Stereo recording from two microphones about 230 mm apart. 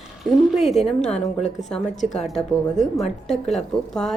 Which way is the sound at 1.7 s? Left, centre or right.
Left.